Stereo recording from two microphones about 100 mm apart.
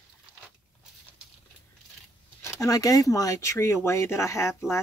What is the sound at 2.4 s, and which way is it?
Speech, 30° left (ahead or behind).